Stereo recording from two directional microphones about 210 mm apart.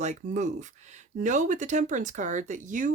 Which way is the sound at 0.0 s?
35° right (ahead or behind).